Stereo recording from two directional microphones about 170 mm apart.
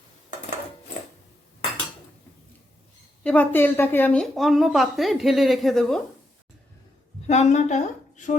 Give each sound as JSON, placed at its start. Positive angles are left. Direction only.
{"t": 3.2, "sound": "a woman's voice", "side_deg": 10}
{"t": 7.3, "sound": "a woman's voice", "side_deg": 45}